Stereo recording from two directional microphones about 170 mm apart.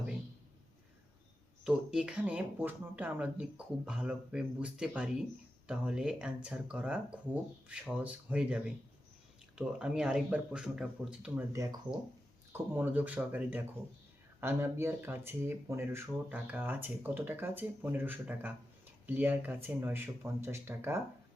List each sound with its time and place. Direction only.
1.6 s speech: 5° right (ahead or behind)
11.5 s speech: 20° right (ahead or behind)